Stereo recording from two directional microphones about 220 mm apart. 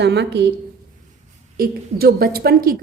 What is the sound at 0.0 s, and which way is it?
Speech, 50° right (ahead or behind).